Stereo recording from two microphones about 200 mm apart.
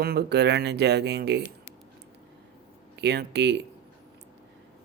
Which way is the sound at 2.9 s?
55° right (ahead or behind).